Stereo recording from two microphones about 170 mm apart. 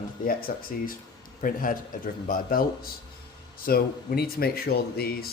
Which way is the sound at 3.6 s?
65° left (ahead or behind).